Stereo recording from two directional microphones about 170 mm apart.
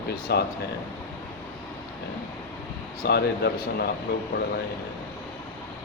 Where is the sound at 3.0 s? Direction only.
70° left (ahead or behind).